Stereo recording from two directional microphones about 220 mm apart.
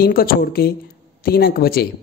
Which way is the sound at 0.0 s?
45° left (ahead or behind).